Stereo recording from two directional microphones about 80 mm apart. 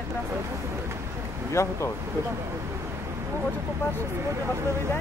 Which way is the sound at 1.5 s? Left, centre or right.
Left.